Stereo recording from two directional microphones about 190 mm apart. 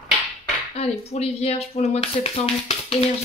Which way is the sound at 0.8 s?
35° left (ahead or behind).